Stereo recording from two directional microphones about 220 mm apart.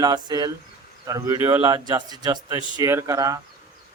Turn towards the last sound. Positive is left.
turn(degrees=-15)  # may be behind; listen again after turning